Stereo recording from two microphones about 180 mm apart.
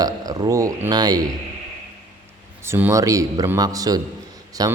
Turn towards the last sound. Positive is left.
turn(degrees=-20)  # may be behind; listen again after turning